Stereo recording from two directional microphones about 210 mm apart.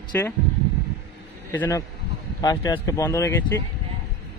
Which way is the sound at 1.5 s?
10° left (ahead or behind).